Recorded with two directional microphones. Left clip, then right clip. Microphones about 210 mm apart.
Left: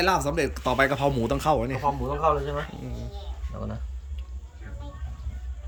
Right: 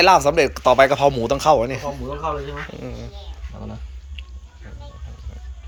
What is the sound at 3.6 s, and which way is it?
Speech, 5° right (ahead or behind).